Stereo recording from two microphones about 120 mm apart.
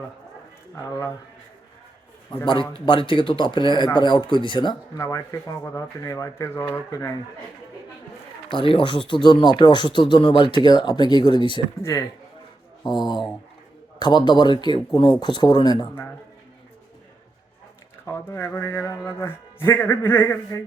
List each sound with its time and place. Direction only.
0.8 s a man's voice: 25° left (ahead or behind)
2.4 s a man's voice: 45° left (ahead or behind)
4.9 s a man's voice: 25° left (ahead or behind)
8.4 s speech: 45° left (ahead or behind)
11.8 s a man's voice: 25° left (ahead or behind)
12.9 s speech: 35° left (ahead or behind)
18.0 s a man's voice: 20° left (ahead or behind)